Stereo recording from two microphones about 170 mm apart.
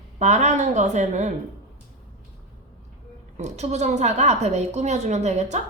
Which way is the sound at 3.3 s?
40° right (ahead or behind).